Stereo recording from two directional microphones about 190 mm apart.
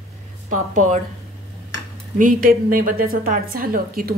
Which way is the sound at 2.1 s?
45° right (ahead or behind).